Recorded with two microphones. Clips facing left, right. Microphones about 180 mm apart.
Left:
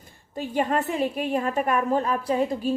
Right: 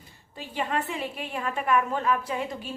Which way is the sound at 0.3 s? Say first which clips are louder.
Left 6 dB; 45° left (ahead or behind).